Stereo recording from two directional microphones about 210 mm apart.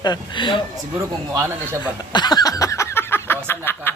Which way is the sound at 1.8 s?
20° left (ahead or behind).